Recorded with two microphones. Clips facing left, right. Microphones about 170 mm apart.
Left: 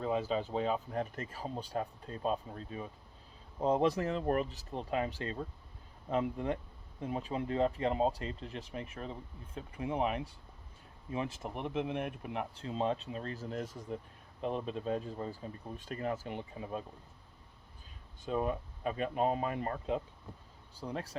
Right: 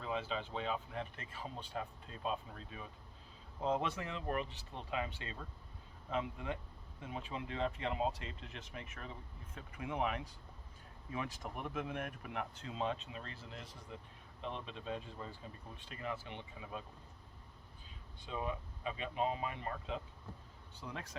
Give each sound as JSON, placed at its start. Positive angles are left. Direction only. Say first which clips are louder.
{"t": 0.0, "sound": "speech", "louder": "left 7 dB", "side_deg": 40}
{"t": 11.5, "sound": "speech", "louder": "left 6 dB", "side_deg": 25}
{"t": 18.3, "sound": "speech", "louder": "left 7 dB", "side_deg": 50}